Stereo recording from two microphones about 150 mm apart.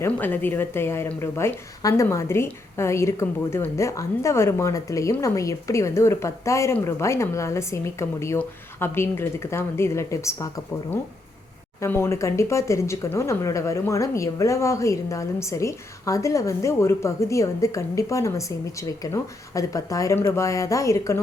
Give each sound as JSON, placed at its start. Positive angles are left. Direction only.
{"t": 0.0, "sound": "a woman's voice", "side_deg": 15}
{"t": 11.8, "sound": "a woman's voice", "side_deg": 15}